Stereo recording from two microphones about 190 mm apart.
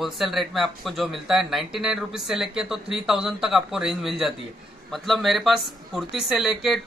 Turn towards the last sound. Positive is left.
turn(degrees=0)  # may be behind; listen again after turning